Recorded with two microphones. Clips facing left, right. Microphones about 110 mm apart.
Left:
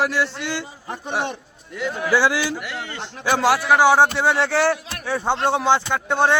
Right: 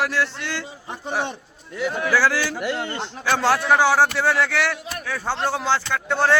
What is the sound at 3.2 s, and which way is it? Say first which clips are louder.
Speech: left 2 dB; 15° left (ahead or behind).